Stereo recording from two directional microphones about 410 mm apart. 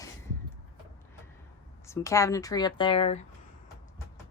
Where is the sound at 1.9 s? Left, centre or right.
Centre.